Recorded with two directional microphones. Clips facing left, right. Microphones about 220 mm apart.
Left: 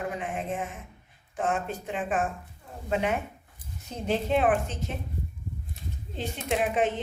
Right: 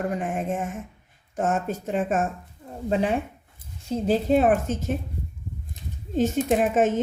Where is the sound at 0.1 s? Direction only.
45° right (ahead or behind).